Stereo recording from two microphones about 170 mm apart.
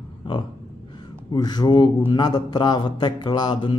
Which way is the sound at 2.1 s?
25° left (ahead or behind).